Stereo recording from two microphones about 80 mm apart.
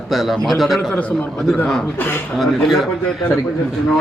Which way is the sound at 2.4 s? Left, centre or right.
Centre.